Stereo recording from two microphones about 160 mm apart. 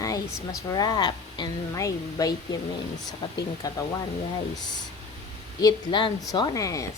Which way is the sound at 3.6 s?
20° left (ahead or behind).